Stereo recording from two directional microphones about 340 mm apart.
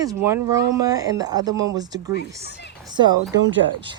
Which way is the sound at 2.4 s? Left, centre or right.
Left.